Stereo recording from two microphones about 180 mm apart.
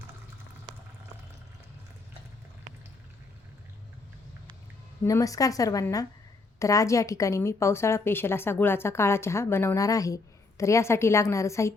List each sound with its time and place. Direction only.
5.0 s a woman's voice: 20° left (ahead or behind)